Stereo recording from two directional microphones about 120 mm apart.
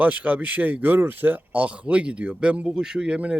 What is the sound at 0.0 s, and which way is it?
Speech, 10° right (ahead or behind).